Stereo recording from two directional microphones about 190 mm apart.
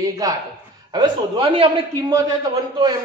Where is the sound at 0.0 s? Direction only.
20° right (ahead or behind).